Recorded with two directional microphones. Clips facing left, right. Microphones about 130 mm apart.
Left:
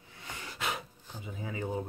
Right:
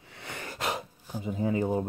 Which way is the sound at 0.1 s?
70° right (ahead or behind).